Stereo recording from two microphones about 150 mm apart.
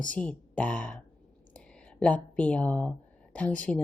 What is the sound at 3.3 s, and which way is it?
Speech, 10° left (ahead or behind).